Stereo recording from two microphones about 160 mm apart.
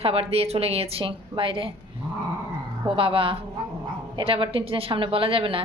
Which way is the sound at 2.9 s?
35° right (ahead or behind).